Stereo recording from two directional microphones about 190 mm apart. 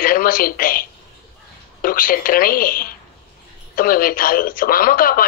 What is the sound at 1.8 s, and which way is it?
Speech, 50° left (ahead or behind).